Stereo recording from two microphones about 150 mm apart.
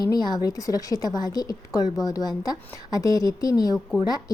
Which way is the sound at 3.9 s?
5° right (ahead or behind).